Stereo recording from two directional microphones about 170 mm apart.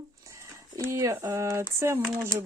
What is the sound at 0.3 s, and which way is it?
Speech, 20° right (ahead or behind).